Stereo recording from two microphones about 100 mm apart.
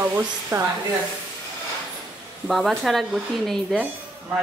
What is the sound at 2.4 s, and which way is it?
Speech, centre (ahead or behind).